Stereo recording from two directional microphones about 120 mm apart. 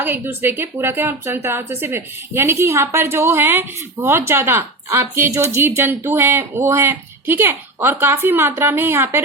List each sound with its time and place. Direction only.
0.0 s speech: 15° right (ahead or behind)